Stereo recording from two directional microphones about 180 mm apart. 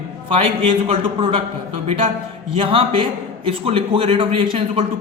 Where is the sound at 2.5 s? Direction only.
30° right (ahead or behind).